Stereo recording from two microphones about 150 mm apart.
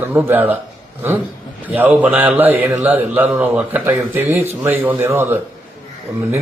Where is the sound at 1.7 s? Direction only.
10° right (ahead or behind).